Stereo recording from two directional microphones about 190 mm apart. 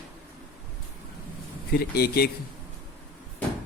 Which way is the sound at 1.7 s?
55° left (ahead or behind).